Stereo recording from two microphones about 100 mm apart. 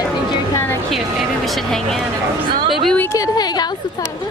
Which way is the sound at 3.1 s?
40° left (ahead or behind).